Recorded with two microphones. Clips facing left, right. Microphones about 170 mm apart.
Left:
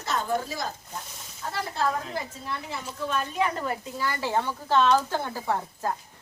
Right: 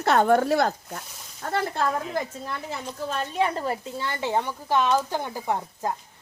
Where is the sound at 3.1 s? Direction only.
35° right (ahead or behind).